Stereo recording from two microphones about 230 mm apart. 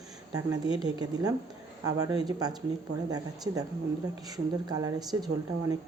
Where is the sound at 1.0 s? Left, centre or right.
Centre.